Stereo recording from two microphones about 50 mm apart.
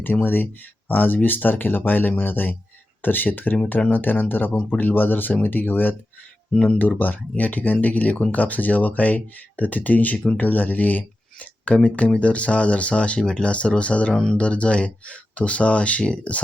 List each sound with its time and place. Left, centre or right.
0.0 s speech: left
14.1 s speech: centre
14.3 s speech: left